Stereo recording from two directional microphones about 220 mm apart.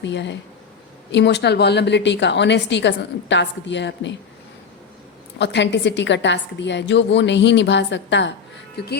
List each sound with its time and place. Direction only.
0.0 s a woman's voice: 55° left (ahead or behind)
5.4 s a woman's voice: 50° left (ahead or behind)